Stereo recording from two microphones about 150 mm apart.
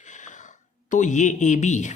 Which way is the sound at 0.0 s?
55° left (ahead or behind).